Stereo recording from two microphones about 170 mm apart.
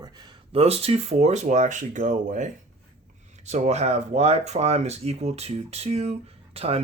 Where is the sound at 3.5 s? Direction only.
40° right (ahead or behind).